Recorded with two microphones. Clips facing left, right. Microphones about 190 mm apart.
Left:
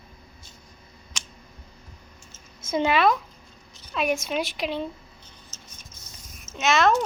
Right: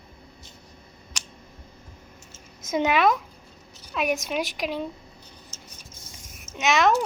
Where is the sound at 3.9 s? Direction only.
5° right (ahead or behind).